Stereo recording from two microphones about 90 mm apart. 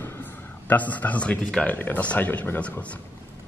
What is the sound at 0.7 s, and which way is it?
A man's voice, 20° left (ahead or behind).